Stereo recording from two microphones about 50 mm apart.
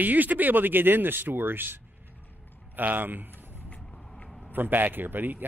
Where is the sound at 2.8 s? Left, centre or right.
Right.